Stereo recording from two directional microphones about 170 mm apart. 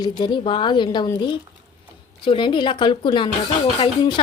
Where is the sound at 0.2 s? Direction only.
30° left (ahead or behind).